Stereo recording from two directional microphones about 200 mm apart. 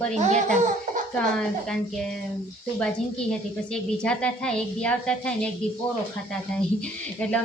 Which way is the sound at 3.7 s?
5° left (ahead or behind).